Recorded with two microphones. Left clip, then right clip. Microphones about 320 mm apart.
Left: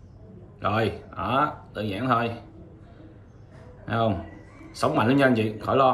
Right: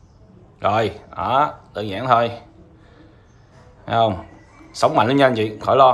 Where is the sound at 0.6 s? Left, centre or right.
Right.